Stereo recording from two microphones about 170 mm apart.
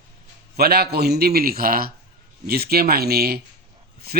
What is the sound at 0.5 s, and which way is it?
A man's voice, 65° right (ahead or behind).